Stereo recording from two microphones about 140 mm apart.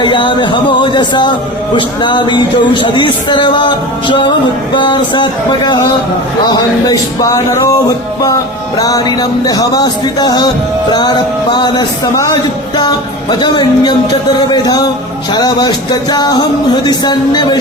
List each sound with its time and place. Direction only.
0.0 s speech: 35° left (ahead or behind)
6.5 s music: 25° left (ahead or behind)
8.8 s speech: 30° left (ahead or behind)
14.5 s music: 30° left (ahead or behind)
16.8 s speech: 30° left (ahead or behind)